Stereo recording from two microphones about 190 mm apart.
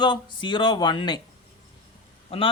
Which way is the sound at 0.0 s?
25° left (ahead or behind).